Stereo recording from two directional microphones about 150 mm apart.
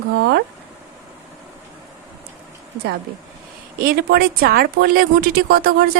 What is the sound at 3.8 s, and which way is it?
Speech, 85° right.